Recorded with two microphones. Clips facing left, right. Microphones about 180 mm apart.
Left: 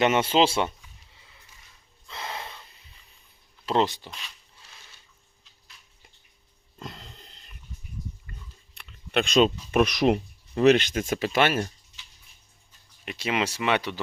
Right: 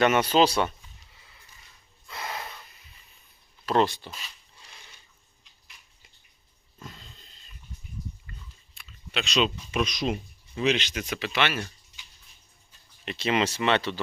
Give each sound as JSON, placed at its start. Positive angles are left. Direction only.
{"t": 0.0, "sound": "speech", "side_deg": 25}
{"t": 2.0, "sound": "gasp", "side_deg": 25}
{"t": 3.7, "sound": "speech", "side_deg": 20}
{"t": 4.1, "sound": "a sound", "side_deg": -5}
{"t": 6.7, "sound": "a sound", "side_deg": 75}
{"t": 8.7, "sound": "speech", "side_deg": 60}
{"t": 13.1, "sound": "speech", "side_deg": 10}